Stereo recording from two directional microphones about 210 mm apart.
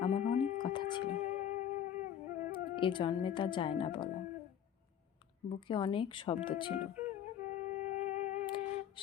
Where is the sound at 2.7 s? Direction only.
25° left (ahead or behind).